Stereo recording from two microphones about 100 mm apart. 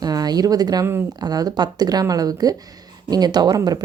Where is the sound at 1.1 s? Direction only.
40° right (ahead or behind).